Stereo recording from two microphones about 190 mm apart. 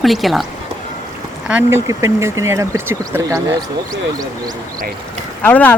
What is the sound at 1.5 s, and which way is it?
Speech, 10° right (ahead or behind).